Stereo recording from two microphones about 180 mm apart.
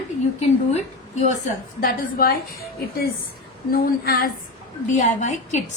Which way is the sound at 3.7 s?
55° left (ahead or behind).